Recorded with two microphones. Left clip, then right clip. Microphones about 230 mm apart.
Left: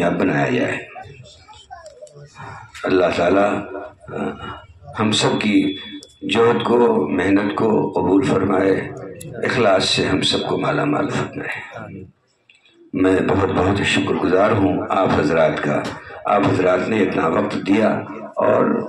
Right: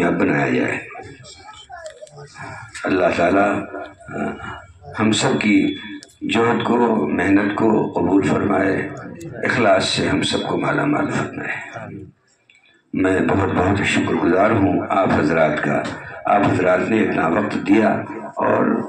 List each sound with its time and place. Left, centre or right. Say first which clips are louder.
0.0 s a man's voice: even; left
2.8 s a man's voice: even; left
12.9 s a man's voice: left 1 dB; left